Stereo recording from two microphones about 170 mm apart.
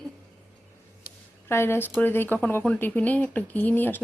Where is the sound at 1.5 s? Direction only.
15° left (ahead or behind).